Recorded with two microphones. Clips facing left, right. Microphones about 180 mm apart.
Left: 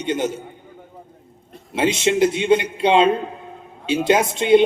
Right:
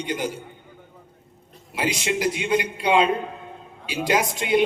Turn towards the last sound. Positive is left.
turn(degrees=25)  # may be behind; listen again after turning